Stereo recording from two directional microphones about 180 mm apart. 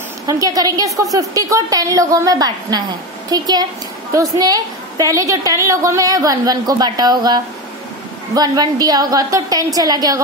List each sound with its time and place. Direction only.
0.3 s a woman's voice: 20° right (ahead or behind)